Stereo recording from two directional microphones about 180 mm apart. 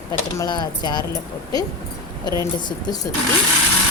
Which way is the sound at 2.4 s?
25° left (ahead or behind).